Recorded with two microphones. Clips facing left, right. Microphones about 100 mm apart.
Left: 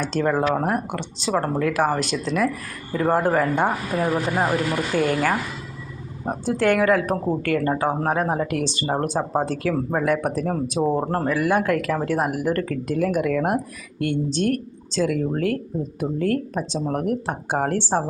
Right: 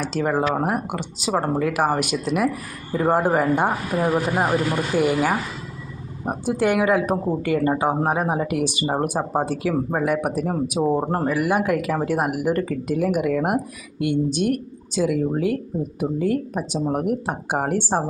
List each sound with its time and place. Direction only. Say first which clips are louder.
0.0 s speech: left 1 dB; 5° right (ahead or behind)